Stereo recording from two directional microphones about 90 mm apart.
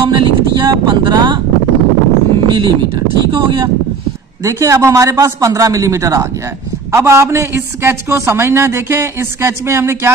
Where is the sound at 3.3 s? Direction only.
50° right (ahead or behind).